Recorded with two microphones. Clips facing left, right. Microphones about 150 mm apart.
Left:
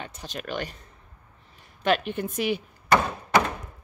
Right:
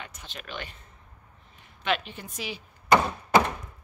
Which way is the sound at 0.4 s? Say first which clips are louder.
Left 7 dB; 45° left (ahead or behind).